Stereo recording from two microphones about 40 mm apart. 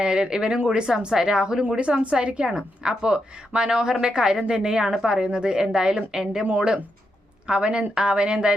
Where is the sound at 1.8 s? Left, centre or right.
Right; by 6.5 s centre.